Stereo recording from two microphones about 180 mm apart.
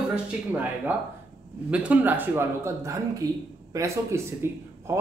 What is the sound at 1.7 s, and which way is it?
A man's voice, 10° right (ahead or behind).